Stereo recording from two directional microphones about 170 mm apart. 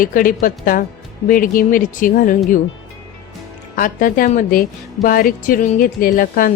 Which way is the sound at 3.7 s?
55° left (ahead or behind).